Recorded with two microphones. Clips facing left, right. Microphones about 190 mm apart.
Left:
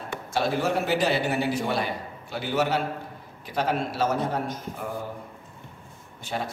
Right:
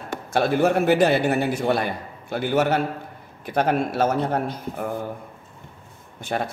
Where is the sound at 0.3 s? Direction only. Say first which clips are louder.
Right 6 dB; 60° right (ahead or behind).